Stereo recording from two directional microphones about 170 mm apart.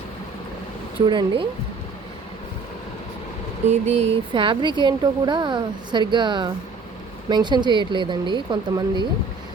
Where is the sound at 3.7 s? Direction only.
40° right (ahead or behind).